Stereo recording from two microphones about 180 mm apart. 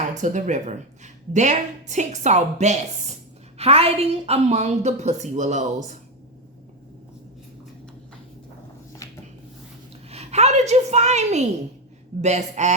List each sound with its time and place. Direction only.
0.1 s speech: 40° right (ahead or behind)
9.0 s a sound: 20° left (ahead or behind)
10.1 s a woman's voice: 35° right (ahead or behind)